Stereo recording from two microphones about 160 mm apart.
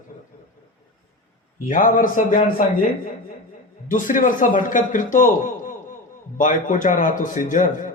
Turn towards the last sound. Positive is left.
turn(degrees=55)  # may be behind; listen again after turning